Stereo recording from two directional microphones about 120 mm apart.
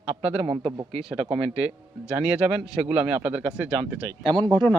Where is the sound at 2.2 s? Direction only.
10° right (ahead or behind).